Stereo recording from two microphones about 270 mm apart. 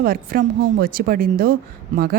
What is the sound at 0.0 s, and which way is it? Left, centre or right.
A woman's voice, right.